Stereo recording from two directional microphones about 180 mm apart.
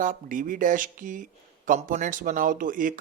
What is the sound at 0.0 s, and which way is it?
Speech, 45° right (ahead or behind).